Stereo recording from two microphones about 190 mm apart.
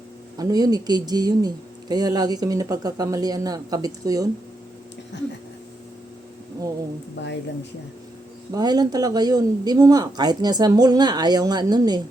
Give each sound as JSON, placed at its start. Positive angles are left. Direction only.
{"t": 0.3, "sound": "speech", "side_deg": -20}
{"t": 5.1, "sound": "a sound", "side_deg": 65}
{"t": 7.2, "sound": "speech", "side_deg": 65}
{"t": 8.5, "sound": "speech", "side_deg": -20}